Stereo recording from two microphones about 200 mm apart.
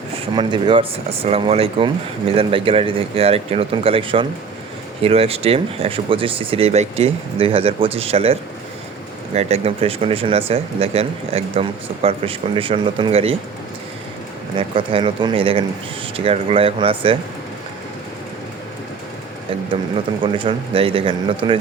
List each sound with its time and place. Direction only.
0.3 s speech: 20° right (ahead or behind)
14.8 s speech: 25° right (ahead or behind)
20.2 s speech: 25° right (ahead or behind)